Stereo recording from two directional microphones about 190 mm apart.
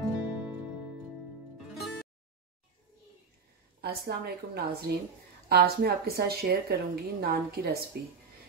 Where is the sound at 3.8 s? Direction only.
55° right (ahead or behind).